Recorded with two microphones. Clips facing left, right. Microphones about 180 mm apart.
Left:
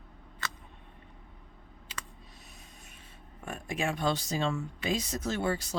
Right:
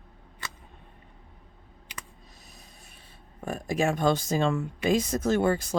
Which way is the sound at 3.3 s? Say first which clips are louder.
Right 7 dB; 40° right (ahead or behind).